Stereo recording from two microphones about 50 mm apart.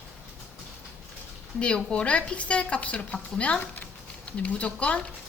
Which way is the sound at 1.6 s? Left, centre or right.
Left.